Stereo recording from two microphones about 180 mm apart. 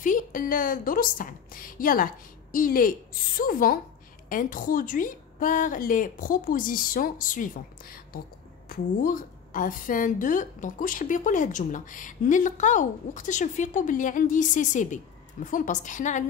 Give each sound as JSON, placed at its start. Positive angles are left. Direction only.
{"t": 0.0, "sound": "a woman's voice", "side_deg": 45}